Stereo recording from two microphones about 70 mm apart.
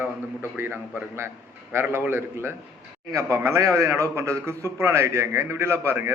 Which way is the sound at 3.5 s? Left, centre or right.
Right.